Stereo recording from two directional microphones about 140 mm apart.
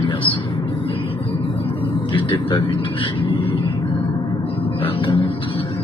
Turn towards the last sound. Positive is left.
turn(degrees=40)  # may be behind; listen again after turning